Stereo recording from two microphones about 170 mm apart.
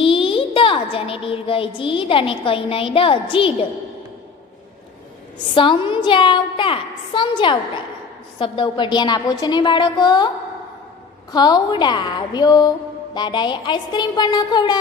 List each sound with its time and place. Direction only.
0.0 s a sound: 30° left (ahead or behind)
1.8 s a woman's voice: 30° left (ahead or behind)
5.5 s a woman's voice: 30° left (ahead or behind)
11.3 s a woman's voice: 25° left (ahead or behind)